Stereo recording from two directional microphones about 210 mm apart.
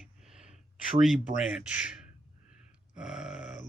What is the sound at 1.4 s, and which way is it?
Speech, 5° right (ahead or behind).